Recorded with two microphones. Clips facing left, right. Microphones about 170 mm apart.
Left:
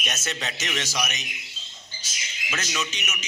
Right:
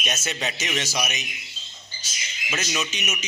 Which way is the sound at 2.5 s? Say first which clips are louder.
Right 2 dB; 15° right (ahead or behind).